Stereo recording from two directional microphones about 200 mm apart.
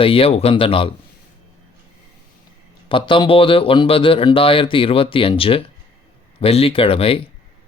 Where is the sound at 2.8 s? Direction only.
25° left (ahead or behind).